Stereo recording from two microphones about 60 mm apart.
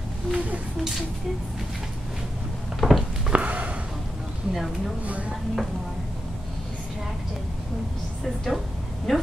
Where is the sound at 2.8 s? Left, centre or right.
Centre.